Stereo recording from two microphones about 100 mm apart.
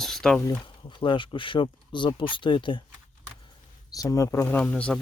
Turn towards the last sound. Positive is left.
turn(degrees=10)  # may be behind; listen again after turning